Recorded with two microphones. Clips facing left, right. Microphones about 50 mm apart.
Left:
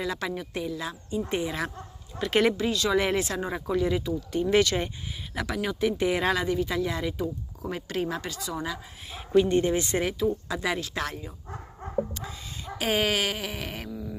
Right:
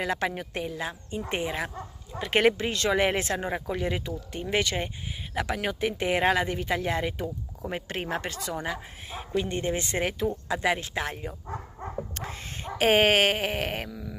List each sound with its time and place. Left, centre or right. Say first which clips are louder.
0.0 s speech: right 2 dB; right
4.5 s speech: left 4 dB; right
10.6 s speech: right 4 dB; right
12.1 s a sound: right 2 dB; right